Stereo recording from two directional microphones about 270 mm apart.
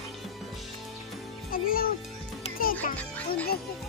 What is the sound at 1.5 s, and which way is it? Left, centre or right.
Music, left.